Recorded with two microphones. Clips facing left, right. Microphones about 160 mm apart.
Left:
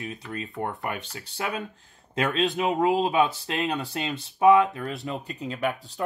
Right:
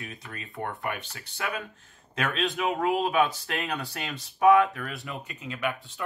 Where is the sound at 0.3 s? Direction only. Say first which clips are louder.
Left 3 dB; 30° left (ahead or behind).